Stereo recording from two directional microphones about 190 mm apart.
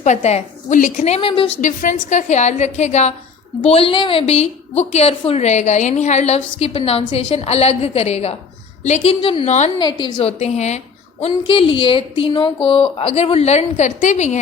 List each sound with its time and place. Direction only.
0.0 s a woman's voice: 35° left (ahead or behind)
1.6 s a woman's voice: 40° left (ahead or behind)
9.7 s a woman's voice: 25° left (ahead or behind); by 14.3 s 40° left (ahead or behind)